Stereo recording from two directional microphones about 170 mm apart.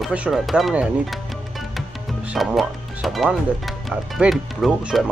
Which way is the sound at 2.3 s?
Centre (ahead or behind).